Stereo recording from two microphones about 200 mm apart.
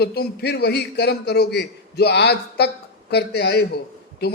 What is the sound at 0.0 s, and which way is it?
A man's voice, 50° left (ahead or behind).